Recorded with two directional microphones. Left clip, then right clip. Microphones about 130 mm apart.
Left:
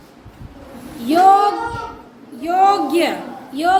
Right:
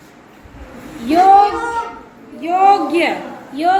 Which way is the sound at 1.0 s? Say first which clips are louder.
Right 2 dB; 25° left (ahead or behind).